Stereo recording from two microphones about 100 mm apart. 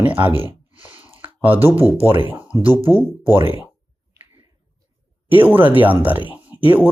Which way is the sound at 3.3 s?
65° right (ahead or behind).